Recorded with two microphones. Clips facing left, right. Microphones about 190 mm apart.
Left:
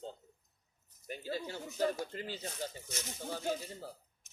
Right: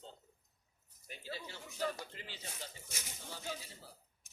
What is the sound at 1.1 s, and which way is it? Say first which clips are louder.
Speech: left 8 dB; 45° left (ahead or behind).